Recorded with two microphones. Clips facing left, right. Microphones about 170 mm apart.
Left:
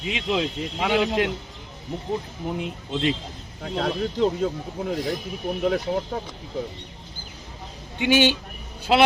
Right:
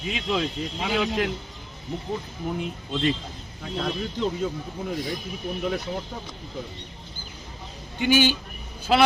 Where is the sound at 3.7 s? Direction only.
60° left (ahead or behind).